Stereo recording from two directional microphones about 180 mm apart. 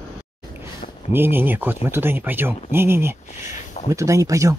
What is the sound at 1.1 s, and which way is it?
Speech, 10° right (ahead or behind).